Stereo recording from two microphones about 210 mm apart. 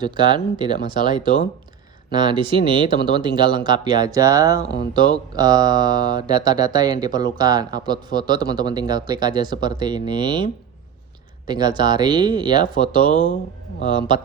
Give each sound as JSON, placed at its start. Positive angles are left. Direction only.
{"t": 0.0, "sound": "speech", "side_deg": -20}
{"t": 11.4, "sound": "speech", "side_deg": -20}